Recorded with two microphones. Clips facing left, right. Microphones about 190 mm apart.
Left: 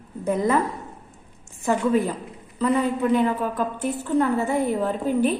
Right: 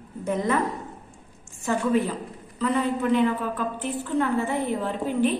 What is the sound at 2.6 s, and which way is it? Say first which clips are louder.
A woman's voice: left 3 dB; 35° left (ahead or behind).